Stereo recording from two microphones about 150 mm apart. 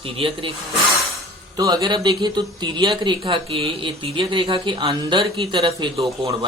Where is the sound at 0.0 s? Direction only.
35° right (ahead or behind).